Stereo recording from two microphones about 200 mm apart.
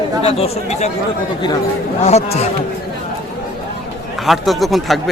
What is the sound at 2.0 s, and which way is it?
Speech, 30° left (ahead or behind).